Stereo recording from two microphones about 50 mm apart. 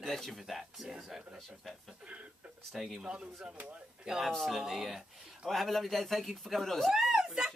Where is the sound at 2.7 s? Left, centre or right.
Centre.